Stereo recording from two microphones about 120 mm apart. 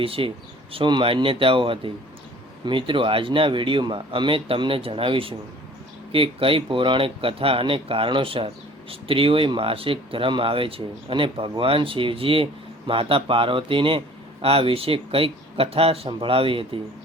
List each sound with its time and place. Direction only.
0.0 s speech: 50° right (ahead or behind)